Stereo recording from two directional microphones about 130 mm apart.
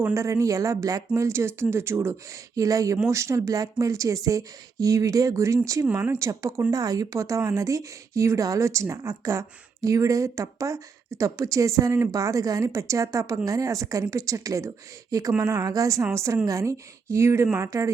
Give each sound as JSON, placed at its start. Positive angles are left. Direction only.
{"t": 0.0, "sound": "speech", "side_deg": -25}